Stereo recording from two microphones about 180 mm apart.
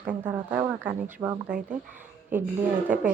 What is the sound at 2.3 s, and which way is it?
Speech, 10° right (ahead or behind).